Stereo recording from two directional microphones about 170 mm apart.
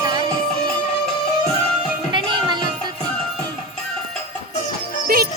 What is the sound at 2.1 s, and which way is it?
Music, 30° right (ahead or behind).